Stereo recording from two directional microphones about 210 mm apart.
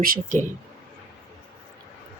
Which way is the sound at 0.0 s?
40° right (ahead or behind).